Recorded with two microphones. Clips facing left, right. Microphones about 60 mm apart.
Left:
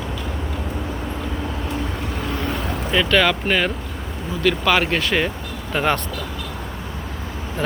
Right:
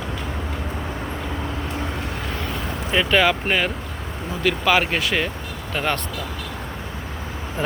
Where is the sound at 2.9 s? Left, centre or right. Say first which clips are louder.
Even; centre.